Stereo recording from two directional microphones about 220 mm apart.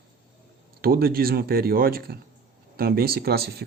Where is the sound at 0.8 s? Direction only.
45° right (ahead or behind).